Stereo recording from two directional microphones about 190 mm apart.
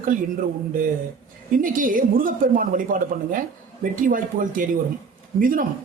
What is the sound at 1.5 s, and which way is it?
Speech, 45° right (ahead or behind).